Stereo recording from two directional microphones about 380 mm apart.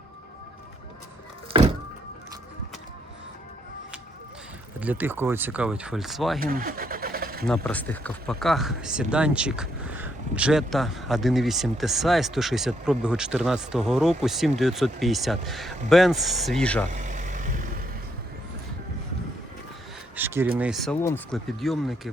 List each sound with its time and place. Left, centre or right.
4.8 s speech: centre
6.4 s vehicle: right
7.4 s speech: centre
16.9 s vehicle: centre
20.1 s speech: centre